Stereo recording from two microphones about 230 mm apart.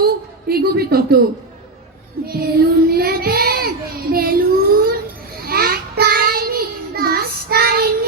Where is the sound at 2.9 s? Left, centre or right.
Right.